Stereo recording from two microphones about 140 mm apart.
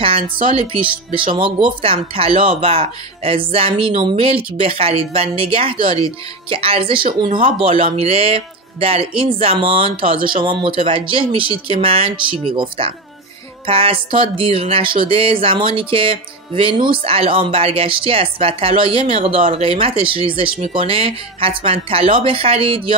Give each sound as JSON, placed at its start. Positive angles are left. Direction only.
{"t": 0.0, "sound": "speech", "side_deg": -40}